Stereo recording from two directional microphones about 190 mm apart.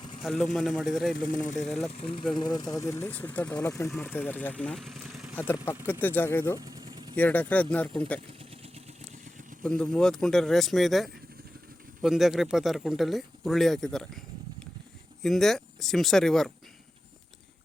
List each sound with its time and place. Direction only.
0.2 s speech: centre (ahead or behind)
1.3 s speech: 40° left (ahead or behind)
1.6 s speech: centre (ahead or behind)
2.3 s speech: 20° left (ahead or behind); by 5.5 s centre (ahead or behind)
5.8 s speech: 10° left (ahead or behind)
6.6 s vehicle: 20° right (ahead or behind)
7.2 s speech: 10° left (ahead or behind)
9.6 s speech: 5° left (ahead or behind)
15.2 s speech: centre (ahead or behind)